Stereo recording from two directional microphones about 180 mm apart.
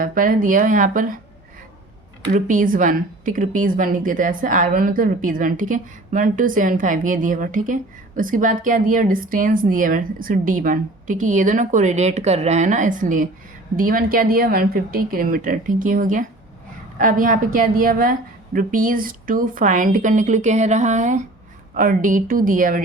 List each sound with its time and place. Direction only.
0.0 s speech: 50° right (ahead or behind)
2.3 s speech: 45° right (ahead or behind)